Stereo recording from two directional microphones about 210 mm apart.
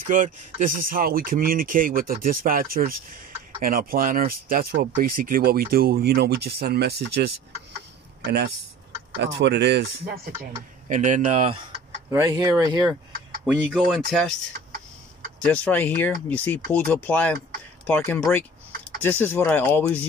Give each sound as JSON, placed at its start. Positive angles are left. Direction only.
{"t": 0.0, "sound": "speech", "side_deg": -40}
{"t": 10.9, "sound": "speech", "side_deg": -35}
{"t": 12.1, "sound": "speech", "side_deg": -15}
{"t": 13.7, "sound": "speech", "side_deg": 0}
{"t": 15.4, "sound": "speech", "side_deg": 5}